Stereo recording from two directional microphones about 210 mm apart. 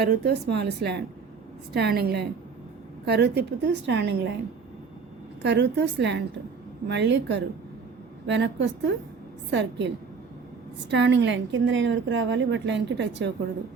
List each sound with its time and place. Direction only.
0.0 s speech: 50° right (ahead or behind)
5.4 s speech: 55° right (ahead or behind)